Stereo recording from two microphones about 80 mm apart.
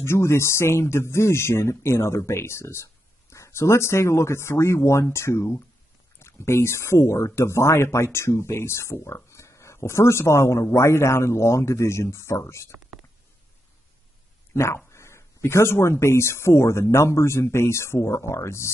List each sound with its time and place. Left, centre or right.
0.0 s speech: left
14.5 s speech: left